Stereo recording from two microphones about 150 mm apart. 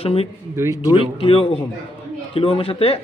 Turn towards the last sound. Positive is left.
turn(degrees=40)  # may be behind; listen again after turning